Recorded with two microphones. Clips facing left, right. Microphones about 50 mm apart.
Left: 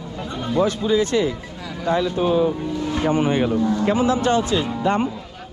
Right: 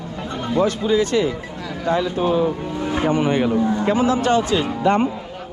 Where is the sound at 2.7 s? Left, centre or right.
Right.